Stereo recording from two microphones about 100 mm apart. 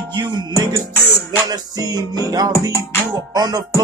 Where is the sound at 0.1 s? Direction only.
45° right (ahead or behind).